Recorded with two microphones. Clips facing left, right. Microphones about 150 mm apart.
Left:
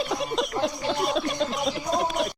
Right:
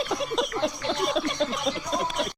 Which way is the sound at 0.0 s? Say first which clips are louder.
Even; centre (ahead or behind).